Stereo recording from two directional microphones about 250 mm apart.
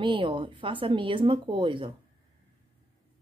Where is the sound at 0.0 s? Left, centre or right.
Centre.